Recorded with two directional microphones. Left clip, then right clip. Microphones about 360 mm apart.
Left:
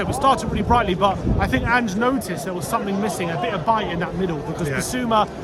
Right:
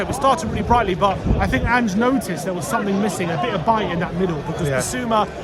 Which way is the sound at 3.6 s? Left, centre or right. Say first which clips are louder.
Right 1 dB; centre.